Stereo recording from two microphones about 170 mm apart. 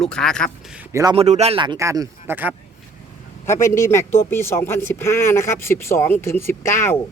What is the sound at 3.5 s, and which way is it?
Speech, 15° left (ahead or behind).